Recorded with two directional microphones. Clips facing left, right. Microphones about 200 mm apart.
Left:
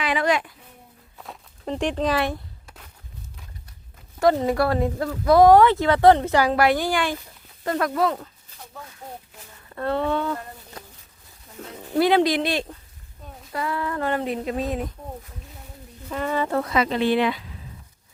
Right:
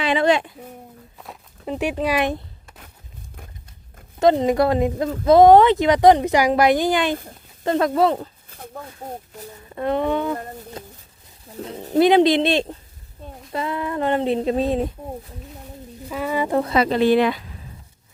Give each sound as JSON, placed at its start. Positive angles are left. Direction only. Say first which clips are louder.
{"t": 0.0, "sound": "a sound", "louder": "right 4 dB", "side_deg": -25}
{"t": 1.2, "sound": "speech", "louder": "even", "side_deg": -5}
{"t": 4.2, "sound": "speech", "louder": "right 3 dB", "side_deg": -20}
{"t": 8.4, "sound": "a sound", "louder": "right 7 dB", "side_deg": -55}
{"t": 9.6, "sound": "speech", "louder": "right 3 dB", "side_deg": -15}
{"t": 11.5, "sound": "speech", "louder": "right 6 dB", "side_deg": -40}
{"t": 11.9, "sound": "speech", "louder": "right 4 dB", "side_deg": -20}
{"t": 16.0, "sound": "speech", "louder": "right 2 dB", "side_deg": -5}
{"t": 16.6, "sound": "speech", "louder": "right 7 dB", "side_deg": -35}